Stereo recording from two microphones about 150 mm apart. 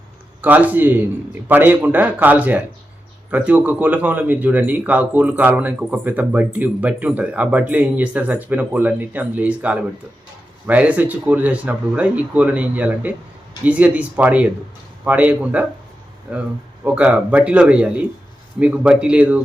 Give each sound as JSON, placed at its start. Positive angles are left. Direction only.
{"t": 0.4, "sound": "speech", "side_deg": -10}